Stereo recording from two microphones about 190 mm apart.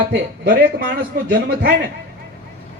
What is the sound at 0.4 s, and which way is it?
A man's voice, 55° right (ahead or behind).